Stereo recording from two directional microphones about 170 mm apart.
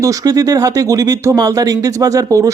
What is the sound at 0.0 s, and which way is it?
Speech, 20° right (ahead or behind).